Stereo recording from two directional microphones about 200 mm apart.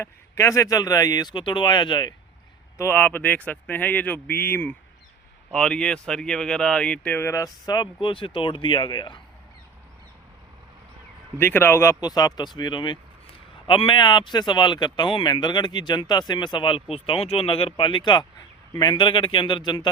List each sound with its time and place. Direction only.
0.0 s speech: 15° left (ahead or behind)
2.7 s speech: 10° left (ahead or behind)
11.3 s speech: 10° left (ahead or behind)